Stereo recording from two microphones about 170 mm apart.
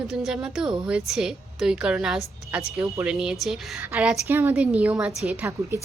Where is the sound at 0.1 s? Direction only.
Centre (ahead or behind).